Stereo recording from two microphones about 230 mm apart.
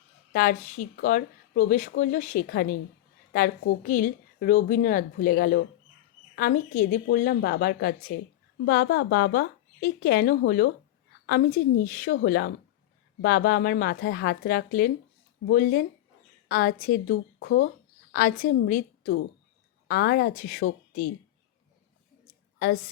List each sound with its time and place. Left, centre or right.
0.3 s a woman's voice: left
3.8 s a woman's voice: left
22.5 s a woman's voice: left